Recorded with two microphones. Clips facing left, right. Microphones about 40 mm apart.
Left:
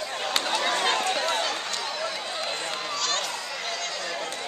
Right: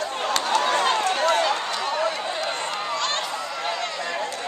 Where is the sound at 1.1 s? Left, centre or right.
Centre.